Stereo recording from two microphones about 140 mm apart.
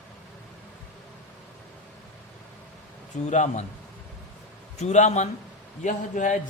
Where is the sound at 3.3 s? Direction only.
60° left (ahead or behind).